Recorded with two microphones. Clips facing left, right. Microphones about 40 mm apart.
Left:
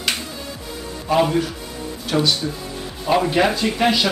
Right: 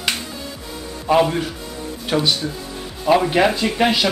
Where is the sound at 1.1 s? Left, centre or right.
Centre.